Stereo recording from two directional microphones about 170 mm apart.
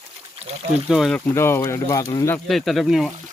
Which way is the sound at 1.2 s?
15° left (ahead or behind).